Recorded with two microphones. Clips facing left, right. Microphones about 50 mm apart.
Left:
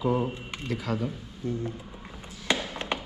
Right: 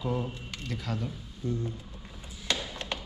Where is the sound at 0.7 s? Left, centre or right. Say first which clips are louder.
Left 5 dB; centre.